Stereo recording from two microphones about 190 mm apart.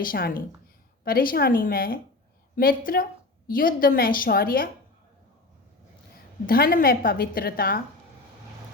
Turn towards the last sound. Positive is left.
turn(degrees=50)  # may be behind; listen again after turning